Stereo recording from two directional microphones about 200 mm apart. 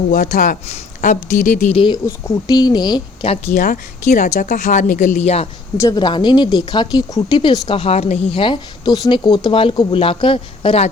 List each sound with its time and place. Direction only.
0.1 s speech: 40° left (ahead or behind)
2.0 s speech: 15° left (ahead or behind); by 5.5 s 30° left (ahead or behind)
5.8 s speech: 20° left (ahead or behind)